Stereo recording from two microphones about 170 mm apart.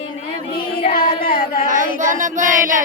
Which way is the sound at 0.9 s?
60° left (ahead or behind).